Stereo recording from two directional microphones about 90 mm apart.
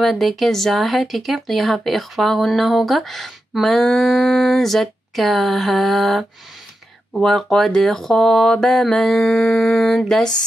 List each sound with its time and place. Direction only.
0.0 s speech: centre (ahead or behind)